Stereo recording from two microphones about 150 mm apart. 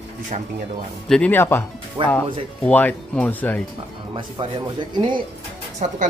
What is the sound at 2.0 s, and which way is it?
Speech, 35° right (ahead or behind).